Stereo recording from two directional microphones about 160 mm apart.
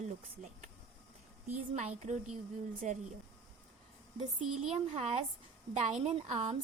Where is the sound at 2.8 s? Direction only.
50° right (ahead or behind).